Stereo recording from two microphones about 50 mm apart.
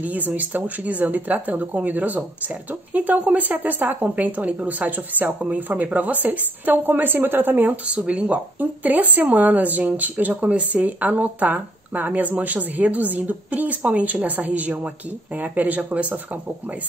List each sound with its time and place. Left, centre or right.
0.0 s speech: right
7.9 s speech: right